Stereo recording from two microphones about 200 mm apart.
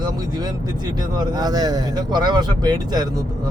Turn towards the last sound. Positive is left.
turn(degrees=-20)  # may be behind; listen again after turning